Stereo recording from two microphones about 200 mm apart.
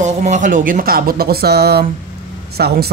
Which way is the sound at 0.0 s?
35° right (ahead or behind).